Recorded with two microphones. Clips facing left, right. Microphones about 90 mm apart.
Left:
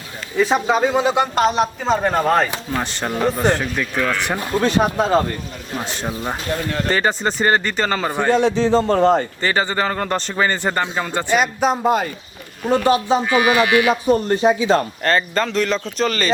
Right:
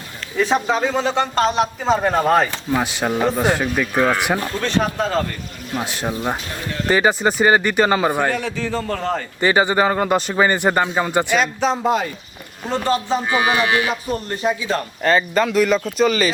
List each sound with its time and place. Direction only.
0.3 s a man's voice: 5° left (ahead or behind)
3.9 s speech: 25° right (ahead or behind)
4.6 s speech: 15° left (ahead or behind)
5.7 s a man's voice: 5° right (ahead or behind)
8.3 s speech: 25° left (ahead or behind)
9.4 s a man's voice: 15° right (ahead or behind)
11.3 s speech: 5° left (ahead or behind)
13.2 s speech: 25° right (ahead or behind)
13.8 s speech: 25° left (ahead or behind)
15.0 s a man's voice: 5° right (ahead or behind)